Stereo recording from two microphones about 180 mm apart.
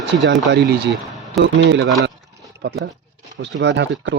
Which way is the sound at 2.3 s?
75° right (ahead or behind).